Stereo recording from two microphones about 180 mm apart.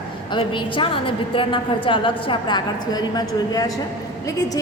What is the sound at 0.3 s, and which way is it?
A woman's voice, 25° left (ahead or behind).